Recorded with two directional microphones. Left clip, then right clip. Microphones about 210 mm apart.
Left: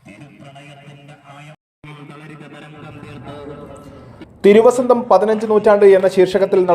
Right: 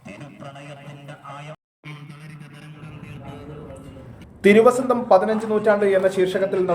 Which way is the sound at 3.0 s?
25° left (ahead or behind).